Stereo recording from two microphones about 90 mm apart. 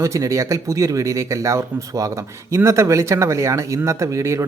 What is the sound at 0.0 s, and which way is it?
Speech, 35° right (ahead or behind).